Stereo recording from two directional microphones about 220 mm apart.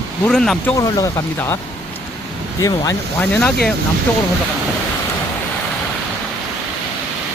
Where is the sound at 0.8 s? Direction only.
15° left (ahead or behind).